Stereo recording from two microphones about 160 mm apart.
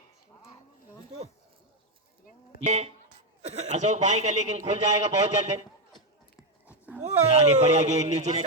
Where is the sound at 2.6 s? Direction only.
45° right (ahead or behind).